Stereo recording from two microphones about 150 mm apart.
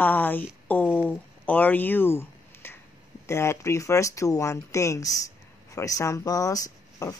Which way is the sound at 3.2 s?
20° left (ahead or behind).